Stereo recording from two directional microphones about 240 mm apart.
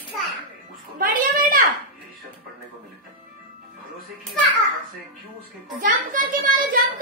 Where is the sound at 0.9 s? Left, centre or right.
Right.